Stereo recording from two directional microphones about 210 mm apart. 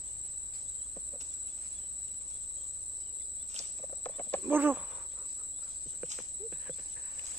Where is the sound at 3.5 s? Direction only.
35° right (ahead or behind).